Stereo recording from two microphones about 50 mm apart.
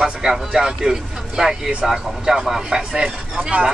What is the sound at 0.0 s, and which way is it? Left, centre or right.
Speech, centre.